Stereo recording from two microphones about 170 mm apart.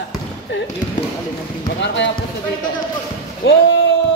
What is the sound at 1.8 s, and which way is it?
Speech, 90° left.